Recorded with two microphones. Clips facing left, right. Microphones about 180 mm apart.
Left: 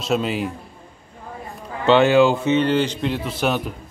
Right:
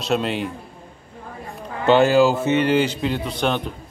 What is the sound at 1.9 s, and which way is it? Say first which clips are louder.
A man's voice: left 1 dB; centre (ahead or behind).